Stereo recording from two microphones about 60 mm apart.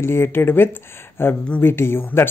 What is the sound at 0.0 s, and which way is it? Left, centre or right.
Speech, left.